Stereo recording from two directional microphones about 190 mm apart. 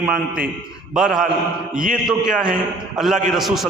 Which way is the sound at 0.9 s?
5° right (ahead or behind).